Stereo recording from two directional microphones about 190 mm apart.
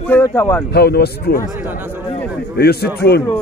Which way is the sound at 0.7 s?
60° left (ahead or behind).